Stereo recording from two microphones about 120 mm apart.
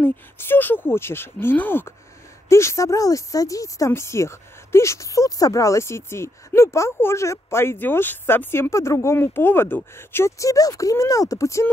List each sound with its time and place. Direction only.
0.0 s speech: 15° left (ahead or behind)